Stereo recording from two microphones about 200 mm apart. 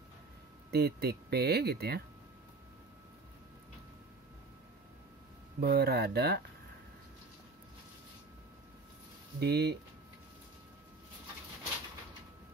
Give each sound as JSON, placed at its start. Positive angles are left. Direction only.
{"t": 0.7, "sound": "speech", "side_deg": -55}
{"t": 5.6, "sound": "speech", "side_deg": -50}
{"t": 9.4, "sound": "speech", "side_deg": -55}